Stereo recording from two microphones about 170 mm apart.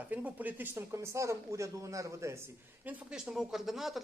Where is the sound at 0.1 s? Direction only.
10° right (ahead or behind).